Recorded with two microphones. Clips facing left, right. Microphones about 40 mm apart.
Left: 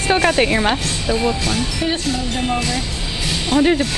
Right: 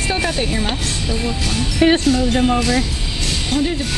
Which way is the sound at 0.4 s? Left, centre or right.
Left.